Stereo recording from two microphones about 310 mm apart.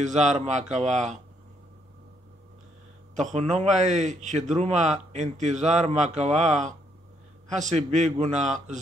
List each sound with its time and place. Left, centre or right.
0.0 s a man's voice: right
3.2 s a man's voice: right